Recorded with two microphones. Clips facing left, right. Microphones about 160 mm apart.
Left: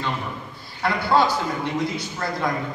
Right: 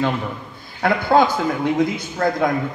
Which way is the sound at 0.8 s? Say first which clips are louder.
Right 4 dB; 50° right (ahead or behind).